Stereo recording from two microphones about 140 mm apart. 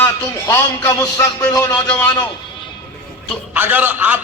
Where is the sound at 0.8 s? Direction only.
30° left (ahead or behind).